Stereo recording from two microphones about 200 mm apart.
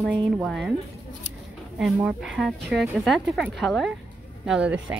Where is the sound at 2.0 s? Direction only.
Centre (ahead or behind).